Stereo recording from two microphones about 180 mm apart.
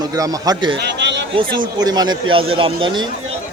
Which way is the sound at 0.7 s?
75° right (ahead or behind).